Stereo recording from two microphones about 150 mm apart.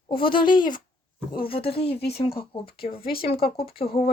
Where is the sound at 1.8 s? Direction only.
90° left.